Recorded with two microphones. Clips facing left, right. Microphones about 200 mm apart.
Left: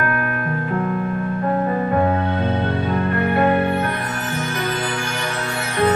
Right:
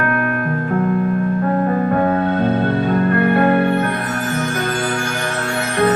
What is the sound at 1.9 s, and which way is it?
Music, 45° right (ahead or behind).